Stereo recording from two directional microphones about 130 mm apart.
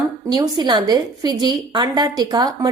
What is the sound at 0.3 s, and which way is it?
A woman's voice, 30° right (ahead or behind).